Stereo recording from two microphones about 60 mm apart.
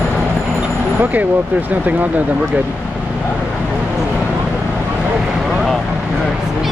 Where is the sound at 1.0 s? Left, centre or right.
Right.